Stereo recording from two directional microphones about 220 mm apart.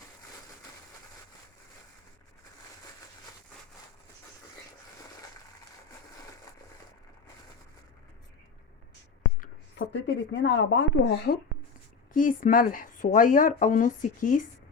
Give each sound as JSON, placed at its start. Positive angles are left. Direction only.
{"t": 9.4, "sound": "speech", "side_deg": 55}
{"t": 12.1, "sound": "speech", "side_deg": 40}